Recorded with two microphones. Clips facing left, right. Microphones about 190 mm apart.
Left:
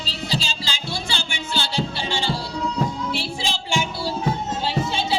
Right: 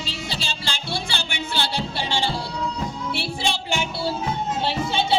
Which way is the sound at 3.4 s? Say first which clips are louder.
Right 1 dB; 60° right (ahead or behind).